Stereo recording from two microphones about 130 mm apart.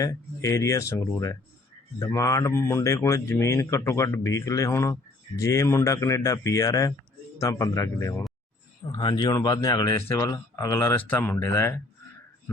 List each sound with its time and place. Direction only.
0.0 s speech: 25° left (ahead or behind)
8.9 s speech: 35° left (ahead or behind); by 11.8 s 20° left (ahead or behind)